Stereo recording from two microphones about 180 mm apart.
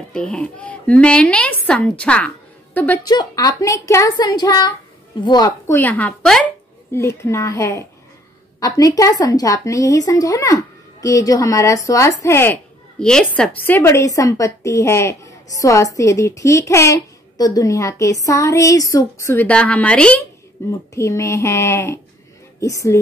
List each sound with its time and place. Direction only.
0.1 s a child's voice: 5° left (ahead or behind)
3.1 s speech: 20° left (ahead or behind)
5.8 s a woman's voice: 10° left (ahead or behind)